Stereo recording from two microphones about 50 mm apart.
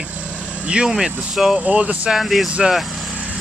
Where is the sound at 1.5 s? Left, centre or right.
Right.